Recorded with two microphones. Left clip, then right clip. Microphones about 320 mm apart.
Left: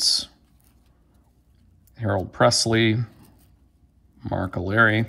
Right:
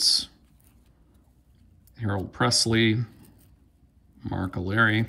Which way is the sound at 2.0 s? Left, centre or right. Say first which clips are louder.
Left 6 dB; centre.